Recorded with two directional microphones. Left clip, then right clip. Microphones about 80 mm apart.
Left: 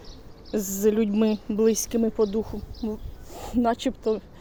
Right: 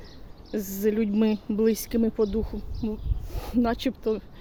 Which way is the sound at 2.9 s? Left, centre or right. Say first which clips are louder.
Left 1 dB; right.